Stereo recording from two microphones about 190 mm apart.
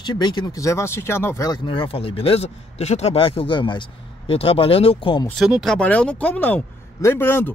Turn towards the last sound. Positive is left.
turn(degrees=10)  # may be behind; listen again after turning